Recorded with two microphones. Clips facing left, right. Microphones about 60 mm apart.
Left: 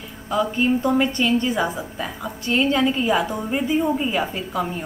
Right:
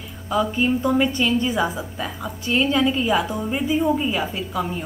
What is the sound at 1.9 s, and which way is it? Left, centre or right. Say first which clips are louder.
A woman's voice: even; centre.